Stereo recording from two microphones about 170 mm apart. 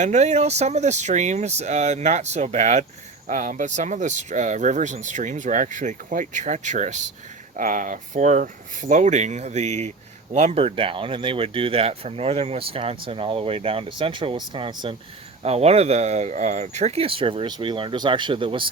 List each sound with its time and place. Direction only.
0.0 s speech: 45° right (ahead or behind)